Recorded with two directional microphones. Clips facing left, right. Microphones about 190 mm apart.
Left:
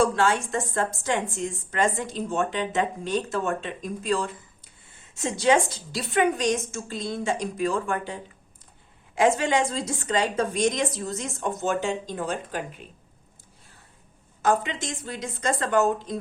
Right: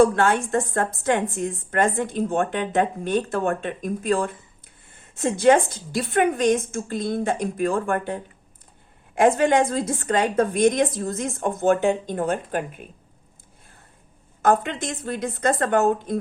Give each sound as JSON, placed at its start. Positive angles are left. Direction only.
{"t": 0.0, "sound": "a woman's voice", "side_deg": -55}
{"t": 14.4, "sound": "a woman's voice", "side_deg": -55}